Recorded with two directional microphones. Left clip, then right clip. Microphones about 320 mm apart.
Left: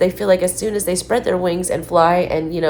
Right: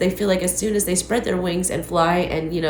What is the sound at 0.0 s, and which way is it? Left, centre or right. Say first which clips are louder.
A woman's voice: left 5 dB; centre.